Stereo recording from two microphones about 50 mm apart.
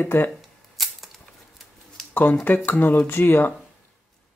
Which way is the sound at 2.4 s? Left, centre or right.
Left.